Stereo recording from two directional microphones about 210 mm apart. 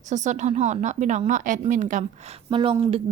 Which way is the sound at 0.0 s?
35° right (ahead or behind).